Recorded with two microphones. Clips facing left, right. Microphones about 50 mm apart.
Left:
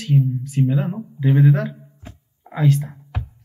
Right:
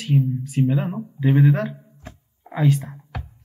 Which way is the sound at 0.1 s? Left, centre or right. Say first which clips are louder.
Left 1 dB; centre.